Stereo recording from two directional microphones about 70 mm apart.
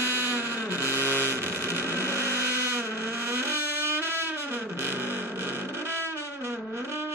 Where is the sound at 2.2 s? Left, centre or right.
Right.